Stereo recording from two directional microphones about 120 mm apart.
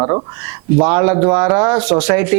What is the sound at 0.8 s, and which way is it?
Speech, 20° right (ahead or behind).